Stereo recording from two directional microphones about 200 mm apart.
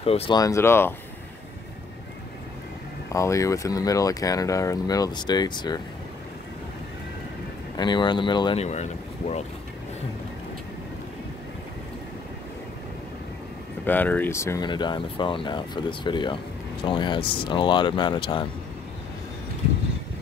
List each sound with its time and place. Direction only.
0.0 s speech: 30° left (ahead or behind)
0.4 s speech: 15° left (ahead or behind)
3.1 s speech: 15° left (ahead or behind)
7.7 s speech: 20° left (ahead or behind)
8.6 s speech: 35° left (ahead or behind)
13.8 s speech: 10° left (ahead or behind); by 18.5 s 25° left (ahead or behind)